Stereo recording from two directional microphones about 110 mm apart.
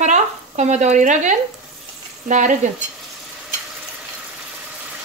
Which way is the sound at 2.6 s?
90° right.